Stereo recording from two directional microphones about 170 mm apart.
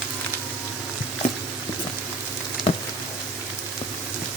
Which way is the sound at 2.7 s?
35° left (ahead or behind).